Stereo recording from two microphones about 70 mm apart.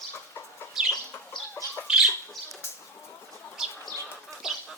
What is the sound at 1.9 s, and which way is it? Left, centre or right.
Bird, centre.